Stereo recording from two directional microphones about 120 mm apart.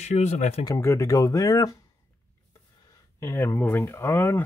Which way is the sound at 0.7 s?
25° left (ahead or behind).